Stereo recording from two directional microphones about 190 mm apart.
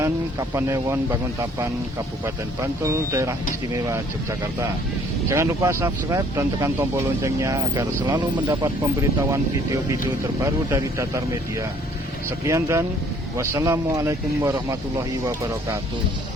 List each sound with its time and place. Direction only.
0.0 s speech: 15° right (ahead or behind)
2.8 s speech: 15° right (ahead or behind)
10.4 s speech: 15° right (ahead or behind)